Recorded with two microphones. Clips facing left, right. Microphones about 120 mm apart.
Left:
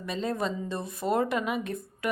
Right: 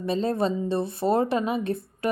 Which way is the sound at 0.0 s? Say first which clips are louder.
Right 6 dB; 30° right (ahead or behind).